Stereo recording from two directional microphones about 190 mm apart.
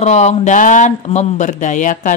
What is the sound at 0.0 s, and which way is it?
Speech, 35° left (ahead or behind).